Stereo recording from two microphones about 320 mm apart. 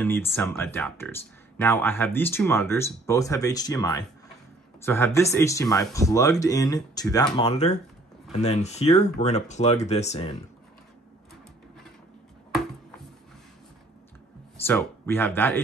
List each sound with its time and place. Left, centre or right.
0.0 s speech: centre
14.6 s speech: centre